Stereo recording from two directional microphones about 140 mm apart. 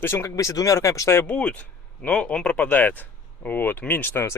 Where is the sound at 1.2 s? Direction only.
10° left (ahead or behind).